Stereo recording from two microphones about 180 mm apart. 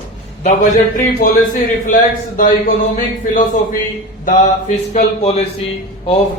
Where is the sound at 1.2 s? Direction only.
45° left (ahead or behind).